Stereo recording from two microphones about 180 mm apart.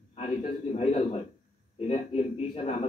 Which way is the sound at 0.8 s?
45° left (ahead or behind).